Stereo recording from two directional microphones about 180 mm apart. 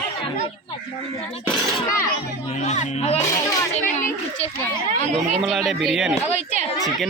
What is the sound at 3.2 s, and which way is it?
Speech, 20° left (ahead or behind).